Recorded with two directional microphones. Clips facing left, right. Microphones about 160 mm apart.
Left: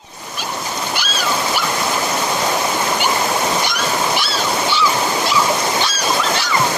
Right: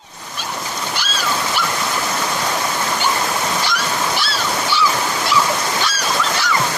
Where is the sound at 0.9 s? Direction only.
15° left (ahead or behind).